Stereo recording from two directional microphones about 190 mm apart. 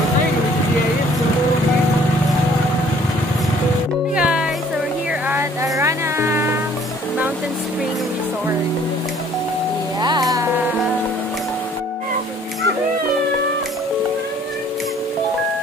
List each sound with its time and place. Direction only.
4.1 s music: 5° right (ahead or behind)
10.0 s music: 20° right (ahead or behind)